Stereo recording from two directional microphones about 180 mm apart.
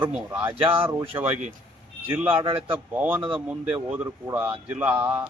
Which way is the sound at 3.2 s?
30° right (ahead or behind).